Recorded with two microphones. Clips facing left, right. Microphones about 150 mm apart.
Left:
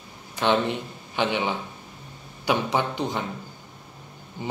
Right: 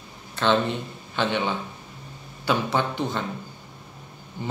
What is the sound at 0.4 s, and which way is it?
A man's voice, 15° left (ahead or behind).